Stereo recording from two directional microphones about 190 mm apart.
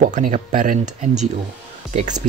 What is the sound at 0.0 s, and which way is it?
Speech, 40° right (ahead or behind).